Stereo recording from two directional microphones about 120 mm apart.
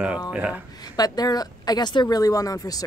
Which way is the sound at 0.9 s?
30° left (ahead or behind).